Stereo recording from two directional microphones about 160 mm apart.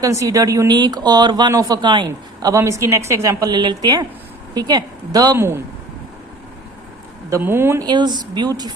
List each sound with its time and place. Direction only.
0.0 s speech: 20° right (ahead or behind)
7.3 s speech: 15° right (ahead or behind)
7.9 s speech: 25° right (ahead or behind)